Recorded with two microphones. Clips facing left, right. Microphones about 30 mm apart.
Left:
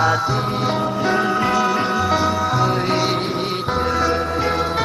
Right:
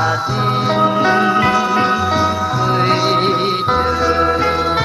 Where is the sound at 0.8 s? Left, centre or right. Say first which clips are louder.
Right 8 dB; right.